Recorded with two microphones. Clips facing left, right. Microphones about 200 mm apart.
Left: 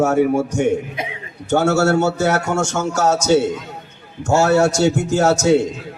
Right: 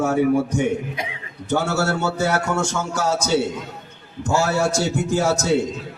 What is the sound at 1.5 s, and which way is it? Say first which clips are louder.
A man's voice: left 6 dB; 60° left (ahead or behind).